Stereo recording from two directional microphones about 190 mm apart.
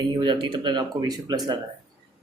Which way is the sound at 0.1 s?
25° right (ahead or behind).